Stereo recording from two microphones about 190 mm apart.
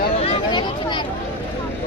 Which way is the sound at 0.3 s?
25° left (ahead or behind).